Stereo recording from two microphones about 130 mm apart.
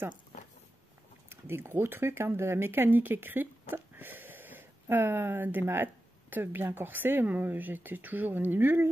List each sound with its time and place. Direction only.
1.3 s speech: 15° right (ahead or behind)